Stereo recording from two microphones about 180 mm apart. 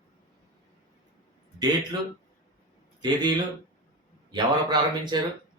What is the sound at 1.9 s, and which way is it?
Speech, 25° right (ahead or behind).